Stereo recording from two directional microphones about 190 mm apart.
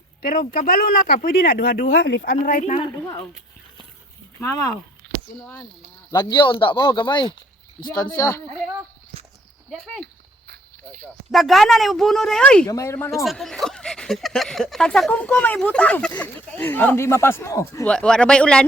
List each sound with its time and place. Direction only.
0.2 s speech: 50° left (ahead or behind); by 2.2 s 65° left (ahead or behind)
2.2 s speech: 45° left (ahead or behind)
2.7 s speech: 25° left (ahead or behind)
4.4 s speech: 15° left (ahead or behind)
6.1 s speech: 20° left (ahead or behind)
9.8 s speech: centre (ahead or behind)
11.3 s speech: centre (ahead or behind)
12.6 s speech: 15° left (ahead or behind)
13.2 s speech: centre (ahead or behind)
17.8 s speech: 5° left (ahead or behind)